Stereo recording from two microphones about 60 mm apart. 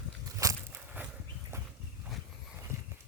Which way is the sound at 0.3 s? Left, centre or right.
Right.